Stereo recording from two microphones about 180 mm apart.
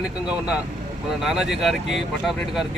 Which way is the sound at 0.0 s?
5° right (ahead or behind).